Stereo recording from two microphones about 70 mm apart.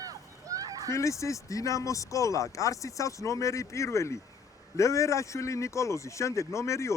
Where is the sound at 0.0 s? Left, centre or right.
Right.